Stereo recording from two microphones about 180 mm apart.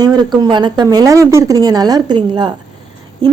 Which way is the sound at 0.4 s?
25° right (ahead or behind).